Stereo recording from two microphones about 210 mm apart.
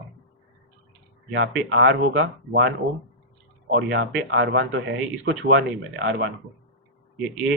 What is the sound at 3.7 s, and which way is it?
Speech, 65° right (ahead or behind).